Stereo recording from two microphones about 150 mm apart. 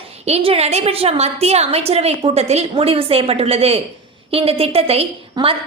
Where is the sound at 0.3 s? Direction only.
45° right (ahead or behind).